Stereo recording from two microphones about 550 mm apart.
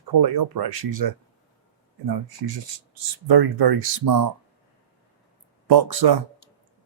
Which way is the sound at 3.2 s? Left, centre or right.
Right.